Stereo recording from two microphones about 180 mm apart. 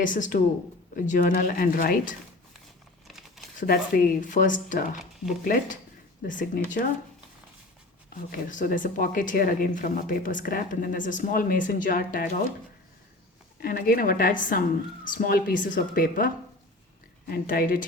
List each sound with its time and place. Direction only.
0.0 s speech: 45° left (ahead or behind)
3.1 s crumpling: centre (ahead or behind)
3.6 s speech: 50° left (ahead or behind)
6.2 s speech: 45° left (ahead or behind)
8.3 s speech: 50° left (ahead or behind)
13.6 s speech: 55° left (ahead or behind)